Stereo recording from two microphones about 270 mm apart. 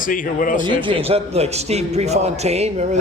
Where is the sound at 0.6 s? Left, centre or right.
Centre.